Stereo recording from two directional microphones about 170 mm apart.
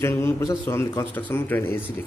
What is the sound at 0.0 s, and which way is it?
A man's voice, 15° left (ahead or behind).